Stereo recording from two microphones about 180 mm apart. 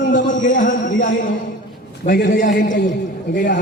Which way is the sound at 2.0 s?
50° left (ahead or behind).